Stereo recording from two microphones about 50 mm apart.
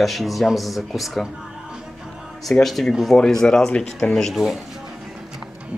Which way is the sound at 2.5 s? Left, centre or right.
Centre.